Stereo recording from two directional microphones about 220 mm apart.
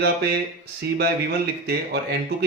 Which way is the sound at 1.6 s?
45° right (ahead or behind).